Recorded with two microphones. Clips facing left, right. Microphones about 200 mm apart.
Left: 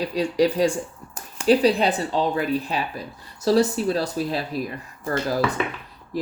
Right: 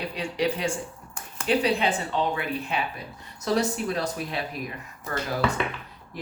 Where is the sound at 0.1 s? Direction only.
35° left (ahead or behind).